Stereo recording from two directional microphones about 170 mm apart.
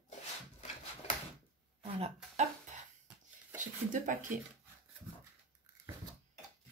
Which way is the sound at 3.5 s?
50° right (ahead or behind).